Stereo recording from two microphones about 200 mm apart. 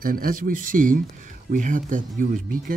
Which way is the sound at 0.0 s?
45° right (ahead or behind).